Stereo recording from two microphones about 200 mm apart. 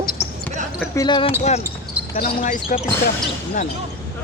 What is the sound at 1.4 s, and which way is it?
Speech, 35° left (ahead or behind).